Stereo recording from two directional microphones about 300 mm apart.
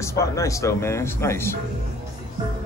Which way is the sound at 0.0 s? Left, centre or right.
Centre.